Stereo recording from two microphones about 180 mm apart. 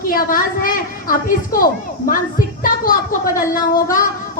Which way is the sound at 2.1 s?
50° left (ahead or behind).